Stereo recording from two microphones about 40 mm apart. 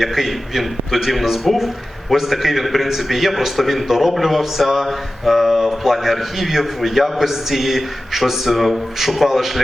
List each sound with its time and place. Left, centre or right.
0.0 s a man's voice: centre